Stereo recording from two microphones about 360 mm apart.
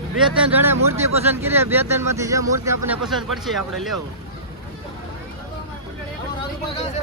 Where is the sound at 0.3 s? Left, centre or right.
Centre.